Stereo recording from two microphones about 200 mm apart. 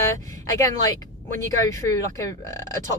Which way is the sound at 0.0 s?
15° left (ahead or behind).